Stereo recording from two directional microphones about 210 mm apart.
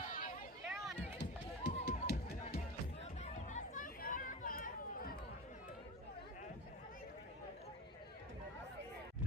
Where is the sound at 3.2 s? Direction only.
35° left (ahead or behind).